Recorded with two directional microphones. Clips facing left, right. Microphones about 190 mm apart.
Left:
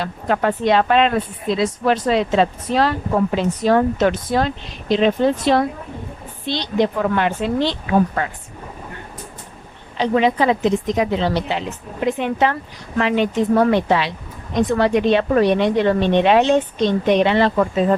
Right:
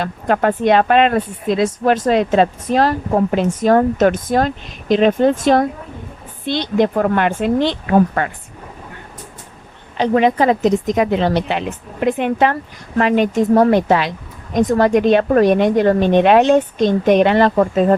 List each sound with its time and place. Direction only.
0.0 s speech: 50° right (ahead or behind)
10.0 s speech: 50° right (ahead or behind)